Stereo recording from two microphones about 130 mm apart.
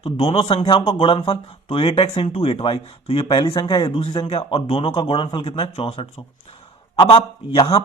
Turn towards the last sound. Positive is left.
turn(degrees=45)  # may be behind; listen again after turning